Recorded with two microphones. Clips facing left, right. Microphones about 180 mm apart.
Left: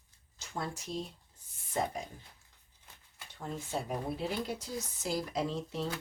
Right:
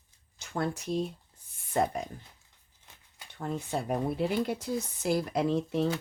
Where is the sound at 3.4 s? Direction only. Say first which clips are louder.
Right 5 dB; 60° right (ahead or behind).